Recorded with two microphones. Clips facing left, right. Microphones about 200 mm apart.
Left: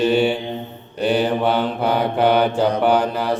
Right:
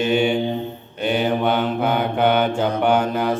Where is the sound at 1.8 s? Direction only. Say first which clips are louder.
Left 3 dB; 35° left (ahead or behind).